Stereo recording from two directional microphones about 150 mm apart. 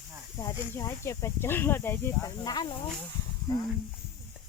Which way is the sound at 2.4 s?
30° left (ahead or behind).